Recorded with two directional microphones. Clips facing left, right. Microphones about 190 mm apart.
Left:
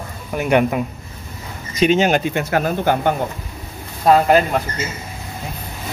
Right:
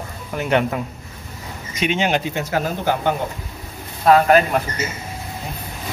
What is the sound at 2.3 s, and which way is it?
Speech, 60° left (ahead or behind).